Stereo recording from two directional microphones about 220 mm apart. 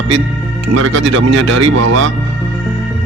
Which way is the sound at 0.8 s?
60° right (ahead or behind).